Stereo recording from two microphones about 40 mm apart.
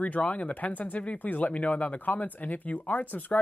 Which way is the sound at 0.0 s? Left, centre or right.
Left.